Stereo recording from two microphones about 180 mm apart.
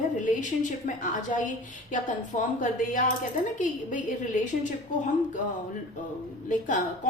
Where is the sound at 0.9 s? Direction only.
45° left (ahead or behind).